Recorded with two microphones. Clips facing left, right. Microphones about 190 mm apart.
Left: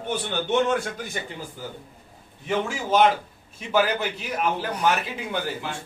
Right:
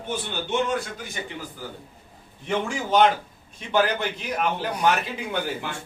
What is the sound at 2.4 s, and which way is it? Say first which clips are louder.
A man's voice: even; 5° left (ahead or behind).